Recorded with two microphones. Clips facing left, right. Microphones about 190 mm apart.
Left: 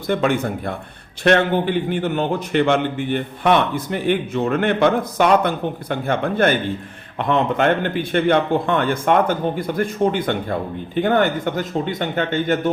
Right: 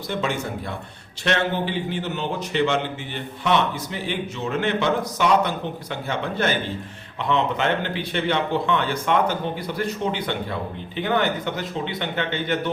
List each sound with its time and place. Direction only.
0.1 s a man's voice: 55° left (ahead or behind)